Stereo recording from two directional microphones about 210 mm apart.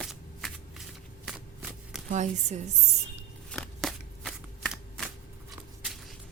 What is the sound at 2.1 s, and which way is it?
Music, 35° right (ahead or behind).